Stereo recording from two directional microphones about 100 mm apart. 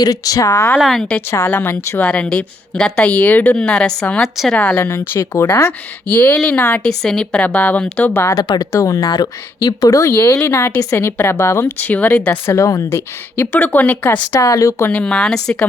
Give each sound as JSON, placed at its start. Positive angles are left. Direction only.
{"t": 0.0, "sound": "speech", "side_deg": 35}
{"t": 0.8, "sound": "speech", "side_deg": 0}
{"t": 1.5, "sound": "speech", "side_deg": 15}
{"t": 8.2, "sound": "speech", "side_deg": 30}
{"t": 10.0, "sound": "a woman's voice", "side_deg": 25}
{"t": 12.5, "sound": "a woman's voice", "side_deg": 30}
{"t": 14.3, "sound": "speech", "side_deg": 35}
{"t": 14.8, "sound": "speech", "side_deg": 10}